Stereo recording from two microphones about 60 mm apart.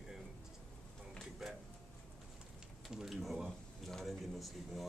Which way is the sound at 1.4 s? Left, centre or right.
Centre.